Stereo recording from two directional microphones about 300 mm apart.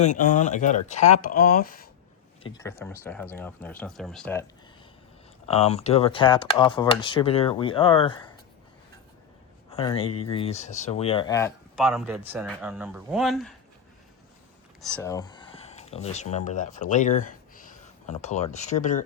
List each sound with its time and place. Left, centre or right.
0.0 s speech: left
2.4 s speech: centre
5.5 s speech: left
9.6 s a man's voice: centre
14.8 s speech: centre; by 19.0 s left